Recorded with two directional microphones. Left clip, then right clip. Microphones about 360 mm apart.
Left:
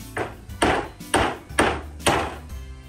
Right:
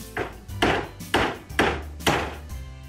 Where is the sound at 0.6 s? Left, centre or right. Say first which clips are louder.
Left 2 dB; centre.